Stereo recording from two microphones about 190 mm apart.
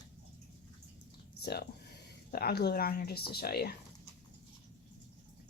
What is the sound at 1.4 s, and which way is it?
Speech, 55° left (ahead or behind).